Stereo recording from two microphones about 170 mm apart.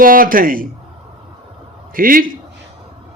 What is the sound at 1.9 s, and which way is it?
Speech, 55° right (ahead or behind).